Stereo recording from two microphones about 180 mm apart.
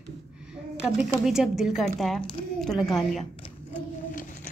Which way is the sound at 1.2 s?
5° right (ahead or behind).